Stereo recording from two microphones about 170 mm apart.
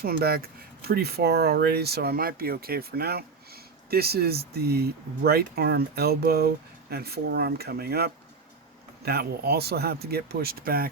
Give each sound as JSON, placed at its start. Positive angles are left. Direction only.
{"t": 0.0, "sound": "speech", "side_deg": -65}